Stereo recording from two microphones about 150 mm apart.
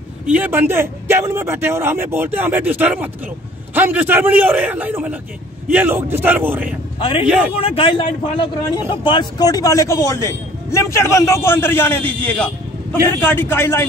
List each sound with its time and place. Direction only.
0.3 s speech: 10° right (ahead or behind)
7.0 s a man's voice: 35° left (ahead or behind)
7.2 s speech: 10° right (ahead or behind)
7.5 s a man's voice: 40° left (ahead or behind); by 13.8 s 15° left (ahead or behind)